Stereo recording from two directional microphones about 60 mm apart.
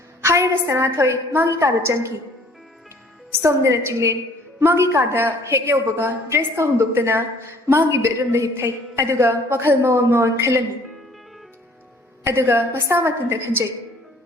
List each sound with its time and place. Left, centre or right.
0.2 s a woman's voice: right
3.4 s a woman's voice: right
12.2 s a woman's voice: right